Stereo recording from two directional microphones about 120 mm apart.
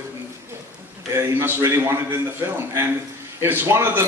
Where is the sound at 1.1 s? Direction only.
20° right (ahead or behind).